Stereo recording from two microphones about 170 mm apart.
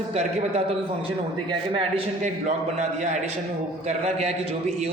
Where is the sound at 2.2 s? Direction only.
45° right (ahead or behind).